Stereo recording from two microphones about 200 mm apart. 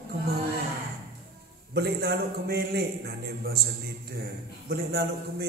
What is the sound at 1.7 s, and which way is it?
Mantra, 50° right (ahead or behind).